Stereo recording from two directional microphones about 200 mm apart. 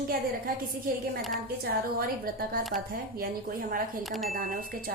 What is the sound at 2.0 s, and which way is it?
Speech, 45° right (ahead or behind).